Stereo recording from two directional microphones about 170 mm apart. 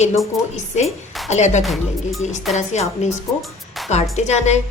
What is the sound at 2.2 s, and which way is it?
Speech, 45° left (ahead or behind).